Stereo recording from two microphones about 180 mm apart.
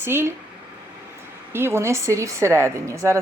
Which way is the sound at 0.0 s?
15° right (ahead or behind).